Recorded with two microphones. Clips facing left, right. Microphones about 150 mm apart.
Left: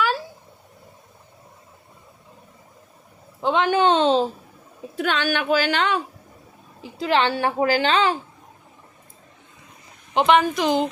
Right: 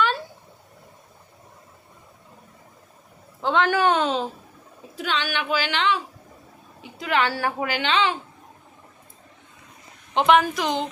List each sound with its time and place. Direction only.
3.4 s a woman's voice: 20° left (ahead or behind)
4.9 s a woman's voice: 50° left (ahead or behind)
6.8 s a woman's voice: 30° left (ahead or behind)
7.7 s speech: 40° left (ahead or behind)
10.2 s a woman's voice: centre (ahead or behind)